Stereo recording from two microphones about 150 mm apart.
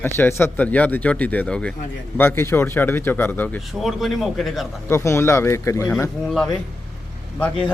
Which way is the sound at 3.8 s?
Centre (ahead or behind).